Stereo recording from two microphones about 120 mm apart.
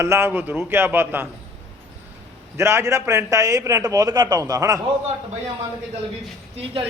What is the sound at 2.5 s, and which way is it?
A man's voice, 20° right (ahead or behind).